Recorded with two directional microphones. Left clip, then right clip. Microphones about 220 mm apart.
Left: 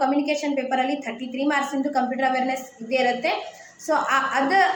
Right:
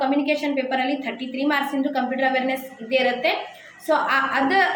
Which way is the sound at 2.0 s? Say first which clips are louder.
Even; centre (ahead or behind).